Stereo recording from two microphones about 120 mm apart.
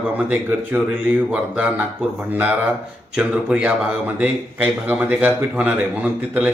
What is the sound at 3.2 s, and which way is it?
A man's voice, 10° right (ahead or behind).